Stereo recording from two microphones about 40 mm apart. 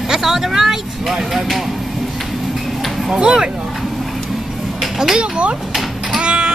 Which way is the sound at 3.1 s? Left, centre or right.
Centre.